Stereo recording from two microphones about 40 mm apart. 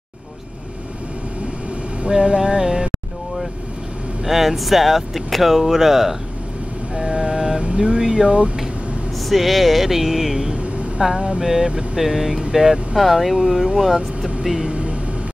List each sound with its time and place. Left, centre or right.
2.0 s music: right
4.2 s speech: centre
7.0 s vehicle: centre
8.0 s speech: centre
9.3 s speech: centre
10.4 s speech: right
11.1 s music: right
12.0 s speech: centre
12.9 s speech: centre
14.7 s a sound: right